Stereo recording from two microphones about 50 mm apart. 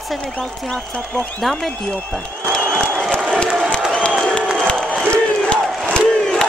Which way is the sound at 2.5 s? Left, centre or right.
Centre.